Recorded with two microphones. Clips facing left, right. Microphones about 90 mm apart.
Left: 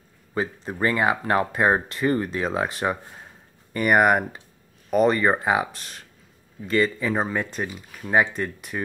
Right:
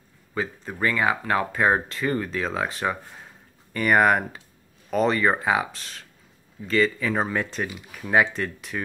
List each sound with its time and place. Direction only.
0.3 s speech: 20° left (ahead or behind)
6.7 s speech: 10° left (ahead or behind)